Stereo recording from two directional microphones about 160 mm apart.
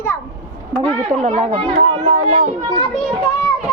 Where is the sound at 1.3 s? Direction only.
35° right (ahead or behind).